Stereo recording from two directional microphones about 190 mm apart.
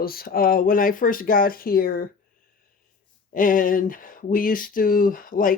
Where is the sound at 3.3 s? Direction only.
45° left (ahead or behind).